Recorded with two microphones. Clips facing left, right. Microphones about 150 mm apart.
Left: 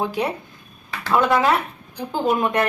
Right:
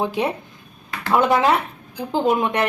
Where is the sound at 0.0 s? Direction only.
20° right (ahead or behind).